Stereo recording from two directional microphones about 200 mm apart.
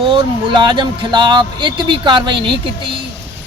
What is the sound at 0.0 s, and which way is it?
Speech, 25° right (ahead or behind).